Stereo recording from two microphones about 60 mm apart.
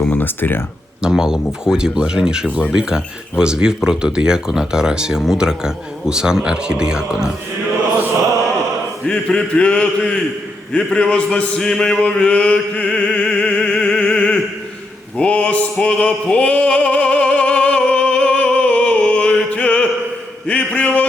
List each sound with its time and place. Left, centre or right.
0.1 s speech: left
1.0 s speech: centre
9.0 s a man's voice: centre
10.9 s chant: centre
15.2 s music: left
20.5 s a sound: left